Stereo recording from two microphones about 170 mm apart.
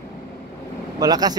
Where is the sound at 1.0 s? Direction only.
25° right (ahead or behind).